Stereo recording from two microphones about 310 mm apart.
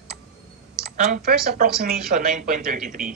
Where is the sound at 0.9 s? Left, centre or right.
Right.